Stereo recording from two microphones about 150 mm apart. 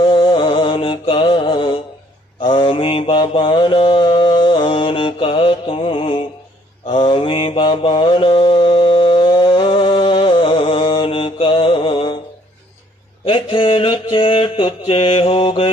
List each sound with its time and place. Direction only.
0.0 s music: 35° left (ahead or behind)
2.4 s mantra: 30° left (ahead or behind)
13.2 s mantra: 35° left (ahead or behind)